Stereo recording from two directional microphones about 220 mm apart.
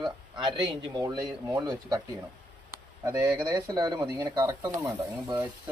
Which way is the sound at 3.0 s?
10° right (ahead or behind).